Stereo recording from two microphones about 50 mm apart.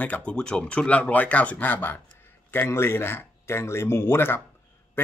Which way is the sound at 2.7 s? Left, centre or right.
Left.